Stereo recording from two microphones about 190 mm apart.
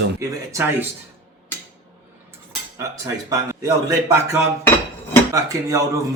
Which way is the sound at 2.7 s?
15° right (ahead or behind).